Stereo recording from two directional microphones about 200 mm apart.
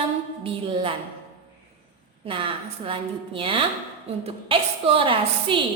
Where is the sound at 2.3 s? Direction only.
25° right (ahead or behind).